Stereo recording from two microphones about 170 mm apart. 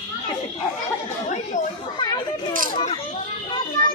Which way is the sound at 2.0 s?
25° left (ahead or behind).